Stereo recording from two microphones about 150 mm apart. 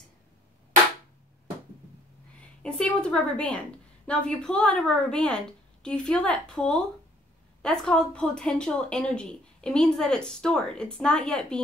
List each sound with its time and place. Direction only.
2.6 s a woman's voice: 5° left (ahead or behind)